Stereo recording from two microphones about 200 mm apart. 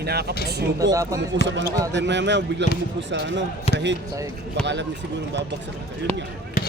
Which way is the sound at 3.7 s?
30° left (ahead or behind).